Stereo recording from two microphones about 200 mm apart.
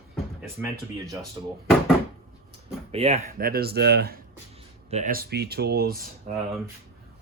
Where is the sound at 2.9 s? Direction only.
30° right (ahead or behind).